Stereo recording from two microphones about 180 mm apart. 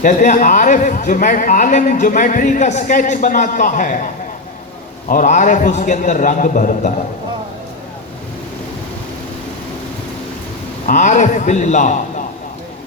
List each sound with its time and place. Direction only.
0.0 s a man's voice: 45° left (ahead or behind)
10.8 s a man's voice: 45° left (ahead or behind)